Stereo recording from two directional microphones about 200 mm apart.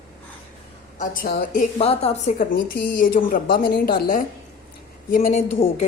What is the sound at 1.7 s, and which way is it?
Speech, 30° left (ahead or behind).